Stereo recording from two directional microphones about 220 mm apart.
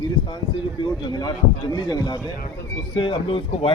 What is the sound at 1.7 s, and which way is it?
Speech, 20° left (ahead or behind).